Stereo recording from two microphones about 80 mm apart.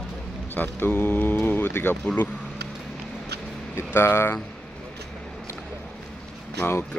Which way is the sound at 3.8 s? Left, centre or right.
Left.